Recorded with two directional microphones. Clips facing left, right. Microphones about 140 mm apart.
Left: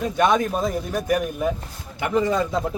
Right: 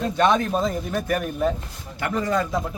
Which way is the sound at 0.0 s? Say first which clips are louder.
Even; 10° left (ahead or behind).